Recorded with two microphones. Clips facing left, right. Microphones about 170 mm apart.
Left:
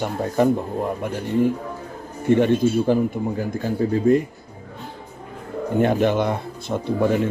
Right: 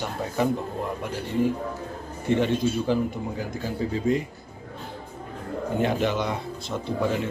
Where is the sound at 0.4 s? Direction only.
50° left (ahead or behind).